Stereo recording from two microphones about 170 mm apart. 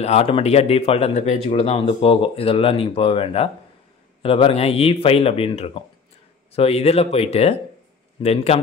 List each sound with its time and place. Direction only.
0.0 s speech: 35° left (ahead or behind)